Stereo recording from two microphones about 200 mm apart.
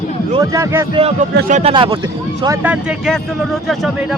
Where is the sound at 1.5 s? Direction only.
30° right (ahead or behind).